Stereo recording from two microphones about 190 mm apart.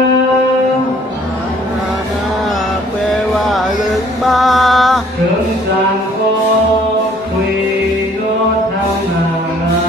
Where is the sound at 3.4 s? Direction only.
Centre (ahead or behind).